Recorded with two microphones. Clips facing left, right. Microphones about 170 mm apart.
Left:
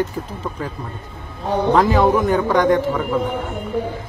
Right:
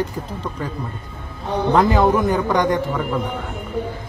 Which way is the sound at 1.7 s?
Centre (ahead or behind).